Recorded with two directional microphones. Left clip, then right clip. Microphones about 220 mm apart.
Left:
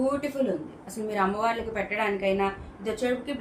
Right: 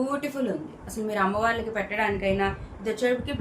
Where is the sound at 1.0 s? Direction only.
20° right (ahead or behind).